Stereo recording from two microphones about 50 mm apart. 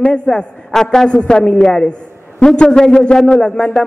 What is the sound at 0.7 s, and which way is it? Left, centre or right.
A man's voice, centre.